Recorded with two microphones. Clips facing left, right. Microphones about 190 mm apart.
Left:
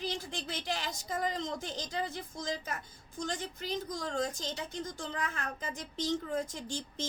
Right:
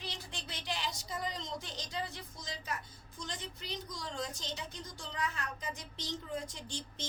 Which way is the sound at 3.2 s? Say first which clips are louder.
Left 7 dB; 45° left (ahead or behind).